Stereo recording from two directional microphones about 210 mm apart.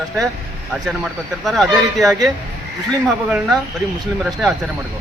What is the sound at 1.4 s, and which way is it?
Speech, centre (ahead or behind).